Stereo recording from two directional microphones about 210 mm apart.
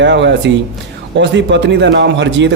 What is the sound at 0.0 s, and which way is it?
A man's voice, 55° right (ahead or behind).